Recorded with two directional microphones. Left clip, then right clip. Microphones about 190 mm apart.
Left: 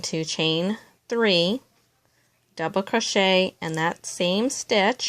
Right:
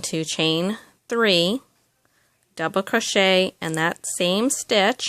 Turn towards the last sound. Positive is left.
turn(degrees=-25)  # may be behind; listen again after turning